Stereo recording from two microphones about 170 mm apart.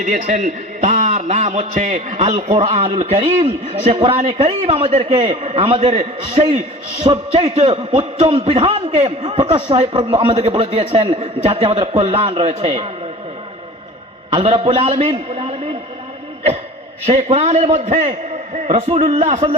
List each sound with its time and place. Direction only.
0.0 s a man's voice: 45° right (ahead or behind)
14.3 s a man's voice: 35° right (ahead or behind)
17.1 s a man's voice: 40° right (ahead or behind)